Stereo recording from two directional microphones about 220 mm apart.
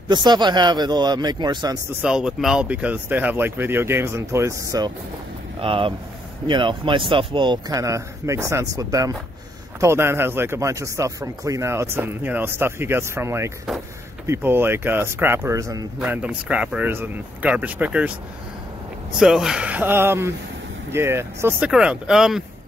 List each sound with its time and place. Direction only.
0.1 s speech: 20° right (ahead or behind)
2.0 s speech: 5° right (ahead or behind)
19.1 s speech: centre (ahead or behind)